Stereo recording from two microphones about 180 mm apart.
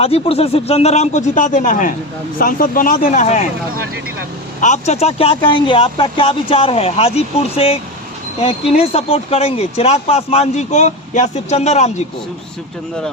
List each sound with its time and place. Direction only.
0.0 s a man's voice: 35° left (ahead or behind)
4.6 s a man's voice: 40° left (ahead or behind)
8.8 s a man's voice: 35° left (ahead or behind)